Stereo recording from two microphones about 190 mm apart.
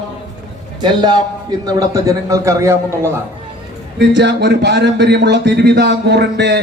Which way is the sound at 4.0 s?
65° right (ahead or behind).